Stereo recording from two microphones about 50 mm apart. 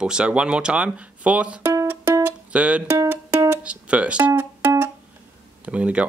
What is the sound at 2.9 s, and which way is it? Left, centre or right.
Music, right.